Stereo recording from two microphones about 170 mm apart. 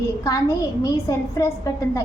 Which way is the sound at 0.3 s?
20° left (ahead or behind).